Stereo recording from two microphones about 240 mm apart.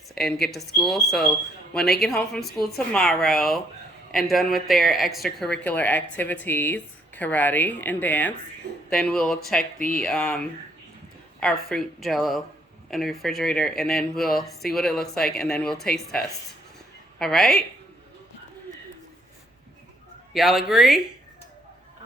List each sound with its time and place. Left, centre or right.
0.1 s a sound: centre
0.4 s speech: centre
9.7 s speech: left
10.0 s speech: centre
20.3 s speech: centre